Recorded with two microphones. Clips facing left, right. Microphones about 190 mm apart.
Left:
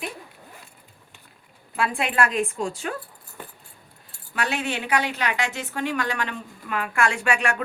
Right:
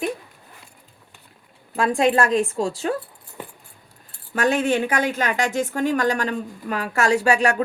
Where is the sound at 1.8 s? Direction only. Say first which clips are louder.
Right 5 dB; 40° right (ahead or behind).